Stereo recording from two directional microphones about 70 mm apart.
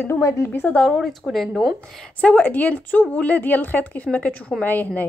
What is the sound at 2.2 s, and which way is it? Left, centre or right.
A woman's voice, left.